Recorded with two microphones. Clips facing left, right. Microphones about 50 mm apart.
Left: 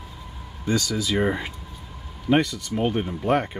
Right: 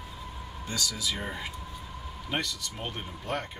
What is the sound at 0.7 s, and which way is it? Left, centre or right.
Speech, left.